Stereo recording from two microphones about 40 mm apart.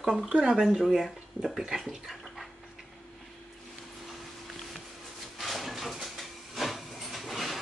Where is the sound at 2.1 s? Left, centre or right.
Centre.